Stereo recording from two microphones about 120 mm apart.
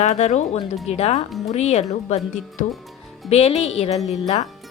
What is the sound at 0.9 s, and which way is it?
Speech, 60° left (ahead or behind).